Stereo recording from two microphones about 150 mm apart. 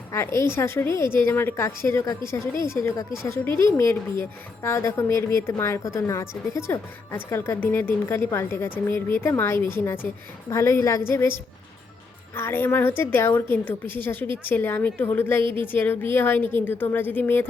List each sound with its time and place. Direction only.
0.1 s a woman's voice: 20° left (ahead or behind)
3.5 s a woman's voice: 30° right (ahead or behind)
4.2 s a woman's voice: 15° left (ahead or behind)
12.4 s a woman's voice: 15° left (ahead or behind)